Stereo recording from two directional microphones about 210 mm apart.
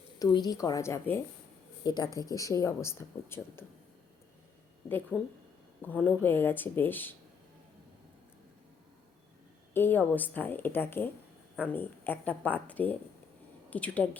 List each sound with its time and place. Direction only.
0.2 s speech: 20° left (ahead or behind)
4.9 s speech: 10° left (ahead or behind)
9.7 s speech: 10° left (ahead or behind)